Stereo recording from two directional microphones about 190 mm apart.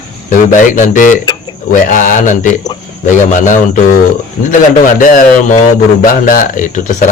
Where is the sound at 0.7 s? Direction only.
45° left (ahead or behind).